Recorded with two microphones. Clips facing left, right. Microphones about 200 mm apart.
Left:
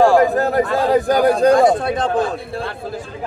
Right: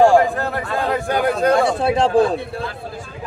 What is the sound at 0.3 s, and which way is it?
A man's voice, 40° left (ahead or behind).